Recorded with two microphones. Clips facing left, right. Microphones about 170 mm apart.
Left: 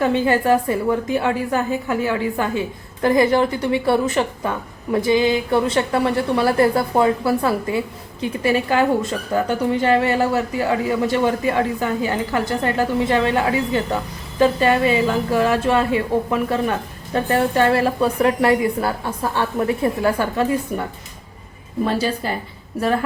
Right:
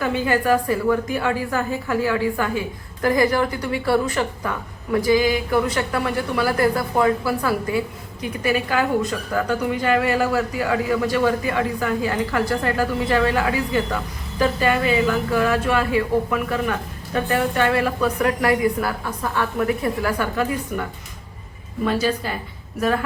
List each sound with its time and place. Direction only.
0.0 s a woman's voice: 25° left (ahead or behind)
21.8 s a woman's voice: 30° left (ahead or behind)